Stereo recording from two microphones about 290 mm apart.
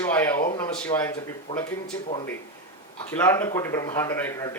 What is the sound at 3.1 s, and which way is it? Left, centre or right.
A man's voice, centre.